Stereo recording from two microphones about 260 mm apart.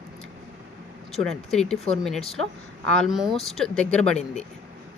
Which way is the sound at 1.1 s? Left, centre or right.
Centre.